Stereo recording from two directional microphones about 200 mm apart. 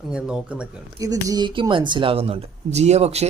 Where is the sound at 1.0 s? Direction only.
15° right (ahead or behind).